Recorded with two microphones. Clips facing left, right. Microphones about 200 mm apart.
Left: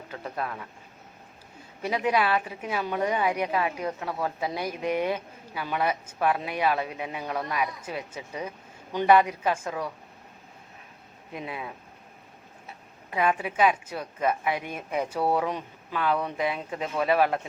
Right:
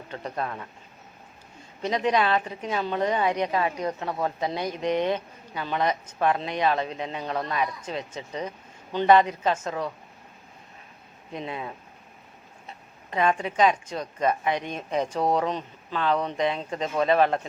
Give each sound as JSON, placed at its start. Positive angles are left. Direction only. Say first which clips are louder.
{"t": 0.1, "sound": "speech", "louder": "right 2 dB", "side_deg": 5}
{"t": 1.8, "sound": "speech", "louder": "right 2 dB", "side_deg": 10}
{"t": 4.6, "sound": "speech", "louder": "right 2 dB", "side_deg": 10}
{"t": 11.3, "sound": "speech", "louder": "right 2 dB", "side_deg": 5}
{"t": 13.1, "sound": "speech", "louder": "right 2 dB", "side_deg": 10}